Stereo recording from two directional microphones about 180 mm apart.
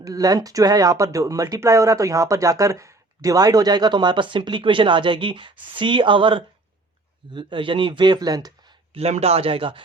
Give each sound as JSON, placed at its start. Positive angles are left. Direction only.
{"t": 0.0, "sound": "speech", "side_deg": -20}
{"t": 9.0, "sound": "speech", "side_deg": -35}